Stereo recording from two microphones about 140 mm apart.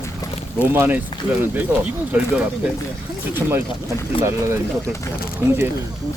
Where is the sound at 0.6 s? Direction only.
15° right (ahead or behind).